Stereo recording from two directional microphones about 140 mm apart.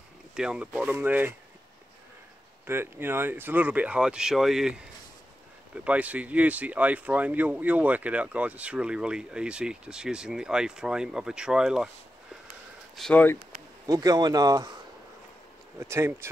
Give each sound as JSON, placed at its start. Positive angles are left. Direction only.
{"t": 0.4, "sound": "speech", "side_deg": -5}
{"t": 2.6, "sound": "speech", "side_deg": -15}
{"t": 5.9, "sound": "speech", "side_deg": -10}
{"t": 12.9, "sound": "speech", "side_deg": 5}
{"t": 13.8, "sound": "speech", "side_deg": -25}
{"t": 15.8, "sound": "speech", "side_deg": -15}